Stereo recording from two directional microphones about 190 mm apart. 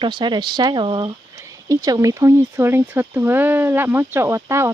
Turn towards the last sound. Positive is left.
turn(degrees=-15)  # may be behind; listen again after turning